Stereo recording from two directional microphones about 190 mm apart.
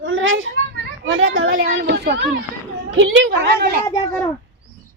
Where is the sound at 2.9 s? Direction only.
80° right; by 3.8 s 65° right (ahead or behind).